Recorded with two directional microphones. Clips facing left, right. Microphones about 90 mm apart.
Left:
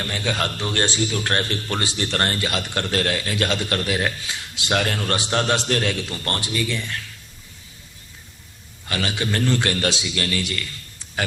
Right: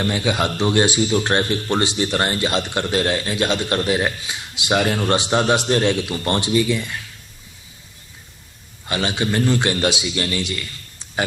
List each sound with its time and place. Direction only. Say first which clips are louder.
0.0 s a man's voice: right 5 dB; 15° right (ahead or behind)
8.9 s a man's voice: right 3 dB; 20° right (ahead or behind)